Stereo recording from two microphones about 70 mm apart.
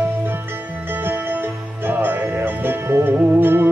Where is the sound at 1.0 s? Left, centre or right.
Right.